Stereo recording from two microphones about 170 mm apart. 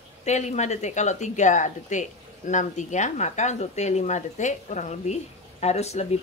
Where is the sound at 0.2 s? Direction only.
40° left (ahead or behind).